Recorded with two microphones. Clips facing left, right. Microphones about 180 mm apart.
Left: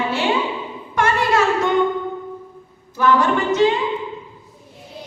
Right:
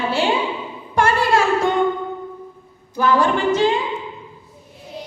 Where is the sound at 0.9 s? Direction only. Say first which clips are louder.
Right 1 dB; 30° right (ahead or behind).